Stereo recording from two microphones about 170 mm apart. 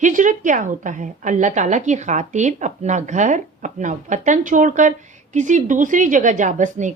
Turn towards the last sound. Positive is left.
turn(degrees=-45)  # may be behind; listen again after turning